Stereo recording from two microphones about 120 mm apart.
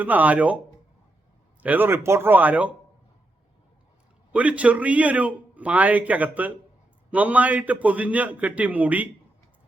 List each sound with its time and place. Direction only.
0.0 s a man's voice: 15° right (ahead or behind)
1.6 s a man's voice: 15° right (ahead or behind)
4.3 s a man's voice: 10° right (ahead or behind)